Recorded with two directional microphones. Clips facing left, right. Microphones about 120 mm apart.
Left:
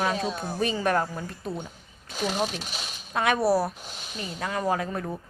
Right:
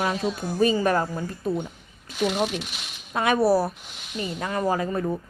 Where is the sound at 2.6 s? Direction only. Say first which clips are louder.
Even; 35° left (ahead or behind).